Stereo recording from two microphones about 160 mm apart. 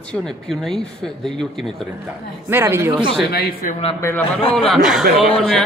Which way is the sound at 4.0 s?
15° left (ahead or behind).